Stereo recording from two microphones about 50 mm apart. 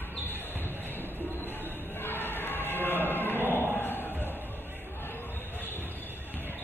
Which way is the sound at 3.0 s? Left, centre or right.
Left.